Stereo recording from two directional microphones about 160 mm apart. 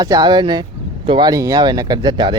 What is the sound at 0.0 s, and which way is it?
Speech, 25° right (ahead or behind).